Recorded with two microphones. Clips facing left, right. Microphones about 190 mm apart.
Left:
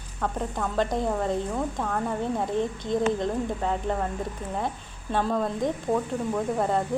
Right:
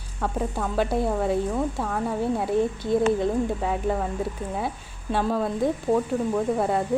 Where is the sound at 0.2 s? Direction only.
5° right (ahead or behind).